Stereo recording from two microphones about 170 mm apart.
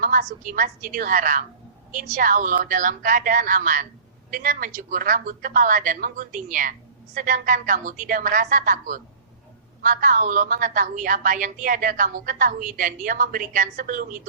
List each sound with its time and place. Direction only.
0.0 s a woman's voice: 55° right (ahead or behind)